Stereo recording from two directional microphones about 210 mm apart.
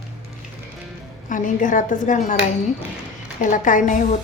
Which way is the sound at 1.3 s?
40° left (ahead or behind).